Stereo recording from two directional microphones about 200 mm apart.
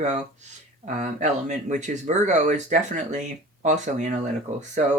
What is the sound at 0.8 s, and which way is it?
Speech, 35° right (ahead or behind).